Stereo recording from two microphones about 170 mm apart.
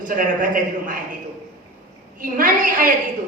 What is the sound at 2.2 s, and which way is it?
Speech, 55° right (ahead or behind).